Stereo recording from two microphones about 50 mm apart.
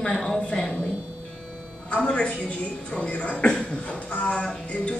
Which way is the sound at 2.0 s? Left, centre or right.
Left.